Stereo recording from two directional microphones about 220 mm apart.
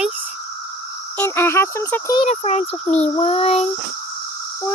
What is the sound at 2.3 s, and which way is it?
Speech, 30° left (ahead or behind).